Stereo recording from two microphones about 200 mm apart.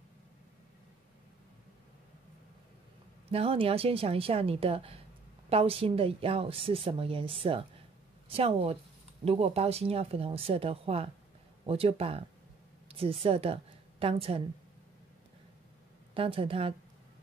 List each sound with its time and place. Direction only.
3.3 s a woman's voice: 30° right (ahead or behind)
16.2 s a woman's voice: 25° right (ahead or behind)